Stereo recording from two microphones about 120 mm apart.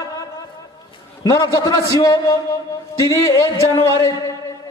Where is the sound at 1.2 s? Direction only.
25° left (ahead or behind).